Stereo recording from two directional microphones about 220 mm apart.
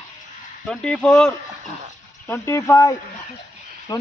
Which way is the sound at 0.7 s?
5° left (ahead or behind).